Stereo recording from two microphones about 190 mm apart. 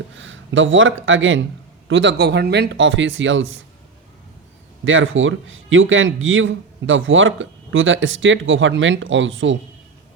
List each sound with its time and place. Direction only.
0.2 s speech: 85° right
1.9 s speech: 75° right (ahead or behind)
4.9 s speech: 90° right